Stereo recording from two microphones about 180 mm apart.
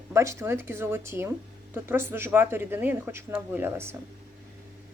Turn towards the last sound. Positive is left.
turn(degrees=-15)  # may be behind; listen again after turning